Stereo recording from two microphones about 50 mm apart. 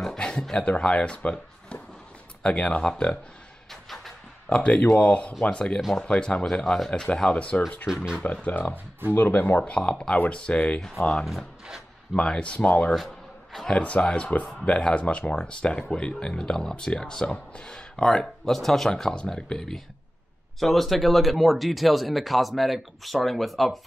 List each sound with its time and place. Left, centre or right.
0.0 s speech: centre
4.5 s speech: left
6.6 s speech: centre
6.9 s speech: left
7.9 s speech: centre
8.2 s speech: left
9.7 s speech: left
12.1 s speech: centre
12.9 s a sound: centre
13.7 s speech: left; by 23.9 s centre